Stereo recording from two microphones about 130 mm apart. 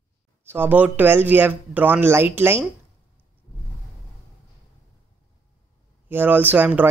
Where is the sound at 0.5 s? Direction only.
15° right (ahead or behind).